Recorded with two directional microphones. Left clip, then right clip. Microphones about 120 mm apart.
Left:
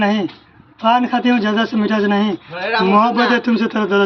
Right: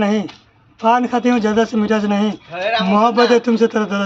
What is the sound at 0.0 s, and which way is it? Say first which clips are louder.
A man's voice: left 1 dB; 30° right (ahead or behind).